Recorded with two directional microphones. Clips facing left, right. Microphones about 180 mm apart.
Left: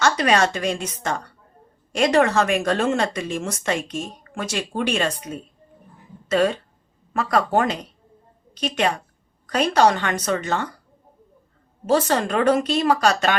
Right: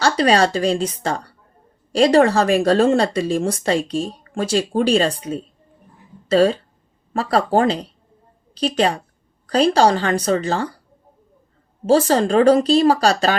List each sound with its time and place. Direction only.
0.0 s speech: 30° right (ahead or behind)
11.9 s speech: 30° right (ahead or behind)